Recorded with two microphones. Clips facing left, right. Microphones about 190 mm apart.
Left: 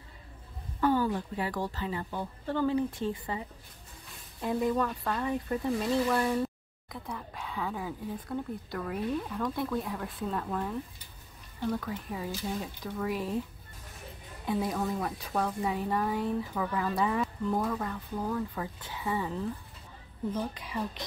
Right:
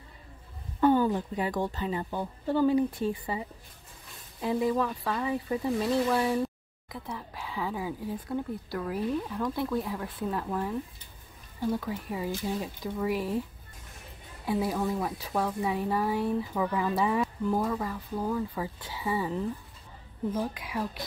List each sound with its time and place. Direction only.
0.7 s a woman's voice: 20° right (ahead or behind); by 13.3 s 5° right (ahead or behind)
14.4 s speech: 5° right (ahead or behind)